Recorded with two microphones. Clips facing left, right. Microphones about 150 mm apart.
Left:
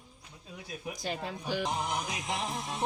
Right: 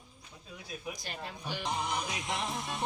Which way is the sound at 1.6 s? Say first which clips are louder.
Right 1 dB; centre (ahead or behind).